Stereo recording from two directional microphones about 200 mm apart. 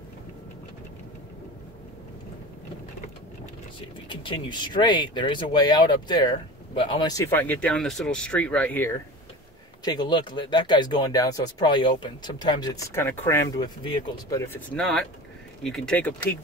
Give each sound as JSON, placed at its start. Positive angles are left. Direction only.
{"t": 4.1, "sound": "speech", "side_deg": 25}
{"t": 9.8, "sound": "speech", "side_deg": 20}
{"t": 14.8, "sound": "speech", "side_deg": 0}